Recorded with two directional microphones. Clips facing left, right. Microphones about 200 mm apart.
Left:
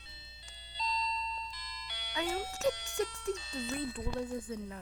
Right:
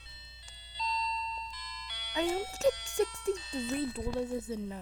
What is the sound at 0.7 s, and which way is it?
Alarm clock, 35° left (ahead or behind).